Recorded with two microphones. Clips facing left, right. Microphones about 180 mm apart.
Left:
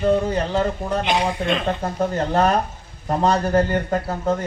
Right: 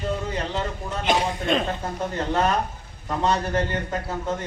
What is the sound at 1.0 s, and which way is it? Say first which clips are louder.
Speech: right 1 dB; 40° right (ahead or behind).